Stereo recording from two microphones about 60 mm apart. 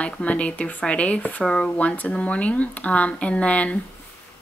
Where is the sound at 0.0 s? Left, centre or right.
Left.